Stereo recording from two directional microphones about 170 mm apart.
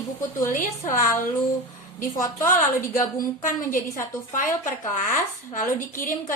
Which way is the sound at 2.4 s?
50° left (ahead or behind).